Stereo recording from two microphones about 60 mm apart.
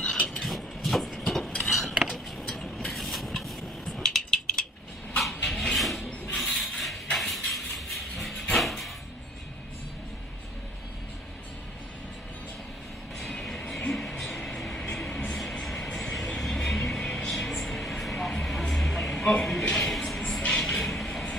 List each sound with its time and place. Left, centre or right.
0.3 s a sound: centre
1.7 s cutlery: centre
2.1 s vehicle: centre
5.2 s wood: centre
6.2 s a sound: centre
13.2 s music: centre
15.6 s music: centre
16.3 s vehicle: centre
17.2 s vehicle: centre
17.5 s a sound: centre
19.7 s music: centre
20.2 s vehicle: centre